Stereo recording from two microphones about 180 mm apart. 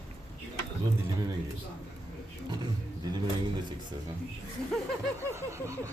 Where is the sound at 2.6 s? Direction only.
20° right (ahead or behind).